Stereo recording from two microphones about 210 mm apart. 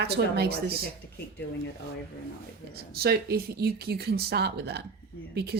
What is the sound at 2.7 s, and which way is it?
Speech, 50° right (ahead or behind).